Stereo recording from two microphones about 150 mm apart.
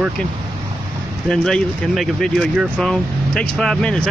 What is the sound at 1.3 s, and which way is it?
Speech, 5° left (ahead or behind).